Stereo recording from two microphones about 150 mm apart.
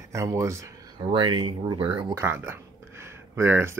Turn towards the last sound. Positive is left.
turn(degrees=-15)  # may be behind; listen again after turning